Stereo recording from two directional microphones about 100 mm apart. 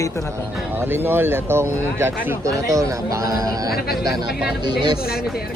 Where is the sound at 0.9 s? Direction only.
20° right (ahead or behind); by 4.1 s 40° right (ahead or behind).